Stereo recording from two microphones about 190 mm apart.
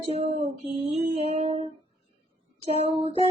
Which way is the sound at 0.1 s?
35° right (ahead or behind).